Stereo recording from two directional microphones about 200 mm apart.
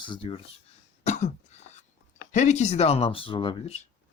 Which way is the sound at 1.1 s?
35° left (ahead or behind).